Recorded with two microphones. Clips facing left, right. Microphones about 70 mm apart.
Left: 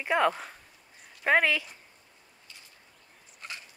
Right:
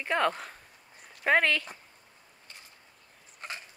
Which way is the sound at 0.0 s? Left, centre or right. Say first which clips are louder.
Left 2 dB; centre.